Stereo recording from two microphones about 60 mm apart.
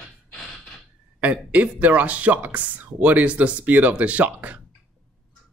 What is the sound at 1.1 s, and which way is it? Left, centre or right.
Speech, right.